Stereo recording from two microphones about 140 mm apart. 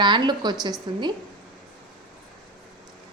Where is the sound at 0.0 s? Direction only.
35° right (ahead or behind).